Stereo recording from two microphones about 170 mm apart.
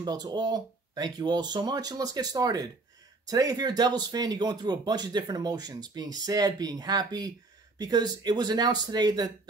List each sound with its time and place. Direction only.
0.0 s speech: 25° right (ahead or behind)